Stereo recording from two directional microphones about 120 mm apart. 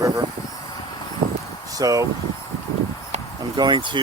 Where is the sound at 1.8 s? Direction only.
30° right (ahead or behind).